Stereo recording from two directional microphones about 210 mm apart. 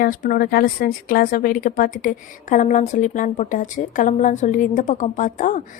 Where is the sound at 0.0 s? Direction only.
45° left (ahead or behind).